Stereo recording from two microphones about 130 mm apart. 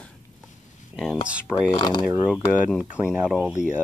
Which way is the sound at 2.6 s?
5° right (ahead or behind).